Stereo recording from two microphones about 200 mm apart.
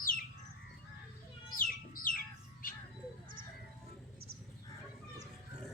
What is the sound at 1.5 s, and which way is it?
Chicken, 45° left (ahead or behind).